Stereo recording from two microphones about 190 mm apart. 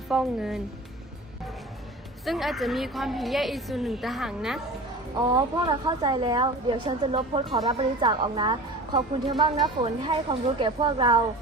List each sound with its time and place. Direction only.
0.1 s a woman's voice: 5° right (ahead or behind)
2.2 s a woman's voice: centre (ahead or behind)
5.3 s a woman's voice: 20° right (ahead or behind)